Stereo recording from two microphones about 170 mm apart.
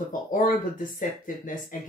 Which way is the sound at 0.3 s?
55° left (ahead or behind).